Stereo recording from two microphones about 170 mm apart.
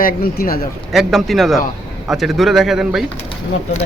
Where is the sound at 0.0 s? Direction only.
60° left (ahead or behind).